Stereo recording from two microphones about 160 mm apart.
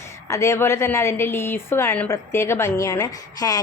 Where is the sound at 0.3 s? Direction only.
20° left (ahead or behind).